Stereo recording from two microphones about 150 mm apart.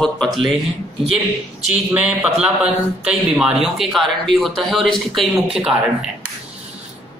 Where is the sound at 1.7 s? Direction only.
10° right (ahead or behind).